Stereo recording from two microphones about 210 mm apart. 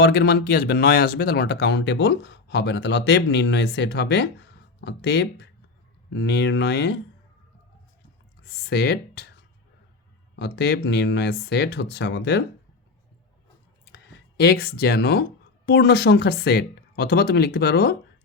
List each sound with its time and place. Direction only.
0.0 s speech: 50° left (ahead or behind)
8.4 s speech: 50° left (ahead or behind)
10.3 s speech: 55° left (ahead or behind)
13.9 s speech: 55° left (ahead or behind)